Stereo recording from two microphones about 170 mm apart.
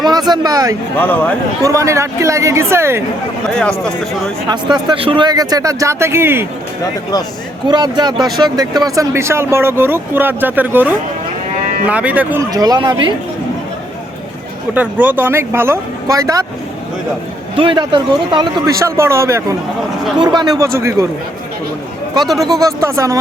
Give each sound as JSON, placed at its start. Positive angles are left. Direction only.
{"t": 0.0, "sound": "a man's voice", "side_deg": -25}
{"t": 0.9, "sound": "speech", "side_deg": 10}
{"t": 1.6, "sound": "speech", "side_deg": -20}
{"t": 3.5, "sound": "speech", "side_deg": 5}
{"t": 4.4, "sound": "a man's voice", "side_deg": -25}
{"t": 7.7, "sound": "speech", "side_deg": -25}
{"t": 12.5, "sound": "a man's voice", "side_deg": -20}
{"t": 14.7, "sound": "speech", "side_deg": -10}
{"t": 17.5, "sound": "a man's voice", "side_deg": -30}
{"t": 22.2, "sound": "speech", "side_deg": 0}
{"t": 22.6, "sound": "speech", "side_deg": -15}